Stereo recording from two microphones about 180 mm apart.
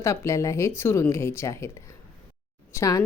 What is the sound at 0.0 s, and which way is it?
A woman's voice, 15° left (ahead or behind).